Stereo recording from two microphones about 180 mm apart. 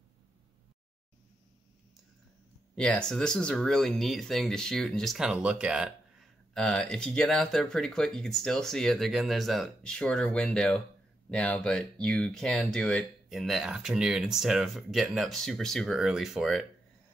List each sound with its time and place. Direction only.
2.7 s speech: 5° left (ahead or behind)